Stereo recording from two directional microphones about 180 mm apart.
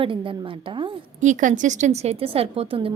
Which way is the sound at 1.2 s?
45° right (ahead or behind).